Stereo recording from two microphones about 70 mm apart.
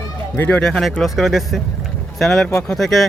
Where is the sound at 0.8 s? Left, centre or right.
Centre.